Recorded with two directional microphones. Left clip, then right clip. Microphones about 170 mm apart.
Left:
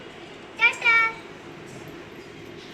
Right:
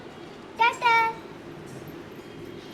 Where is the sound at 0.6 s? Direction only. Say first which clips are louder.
Left 1 dB; 60° right (ahead or behind).